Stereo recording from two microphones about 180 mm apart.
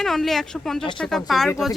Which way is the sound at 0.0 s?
Centre (ahead or behind).